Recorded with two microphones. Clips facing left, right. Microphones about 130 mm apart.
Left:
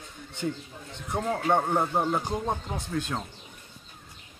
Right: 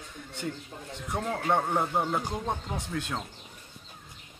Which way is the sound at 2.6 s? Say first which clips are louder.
Left 2 dB; 5° left (ahead or behind).